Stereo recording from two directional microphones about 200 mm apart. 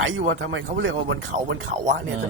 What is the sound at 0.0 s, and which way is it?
Speech, 70° right (ahead or behind).